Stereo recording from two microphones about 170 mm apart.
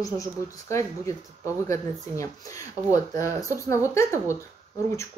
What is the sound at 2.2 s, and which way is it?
Speech, 20° left (ahead or behind).